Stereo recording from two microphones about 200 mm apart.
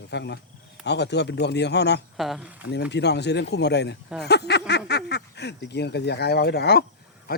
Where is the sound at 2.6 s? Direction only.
60° left (ahead or behind).